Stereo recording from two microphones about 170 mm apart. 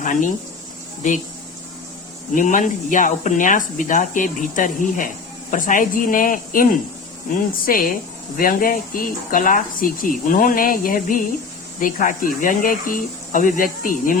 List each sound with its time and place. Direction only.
0.0 s speech: 50° left (ahead or behind)
2.3 s speech: 50° left (ahead or behind)